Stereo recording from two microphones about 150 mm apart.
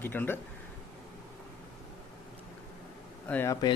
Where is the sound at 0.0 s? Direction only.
15° left (ahead or behind).